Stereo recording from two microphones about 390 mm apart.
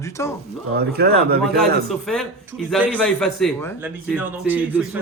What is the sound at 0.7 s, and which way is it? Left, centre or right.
Speech, right.